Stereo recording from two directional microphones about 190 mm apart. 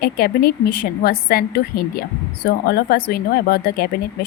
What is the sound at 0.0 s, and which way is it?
A woman's voice, 55° left (ahead or behind).